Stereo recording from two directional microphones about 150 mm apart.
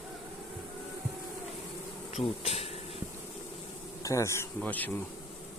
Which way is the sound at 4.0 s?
20° left (ahead or behind).